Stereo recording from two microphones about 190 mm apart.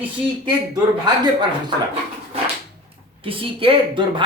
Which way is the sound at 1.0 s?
25° right (ahead or behind).